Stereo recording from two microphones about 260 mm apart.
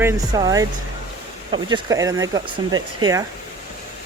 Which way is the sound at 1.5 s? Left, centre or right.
Centre.